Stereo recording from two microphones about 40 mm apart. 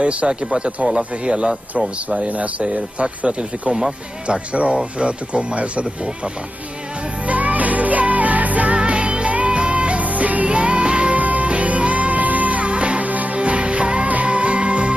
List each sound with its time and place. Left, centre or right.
0.0 s speech: right
2.0 s speech: right
3.7 s speech: centre
4.5 s speech: right
7.2 s music: right
8.7 s music: right
13.4 s music: right